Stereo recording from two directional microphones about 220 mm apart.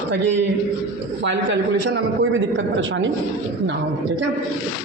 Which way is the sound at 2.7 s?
55° right (ahead or behind).